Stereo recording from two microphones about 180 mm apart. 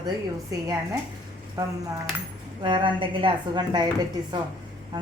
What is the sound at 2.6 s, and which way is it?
Speech, 30° right (ahead or behind).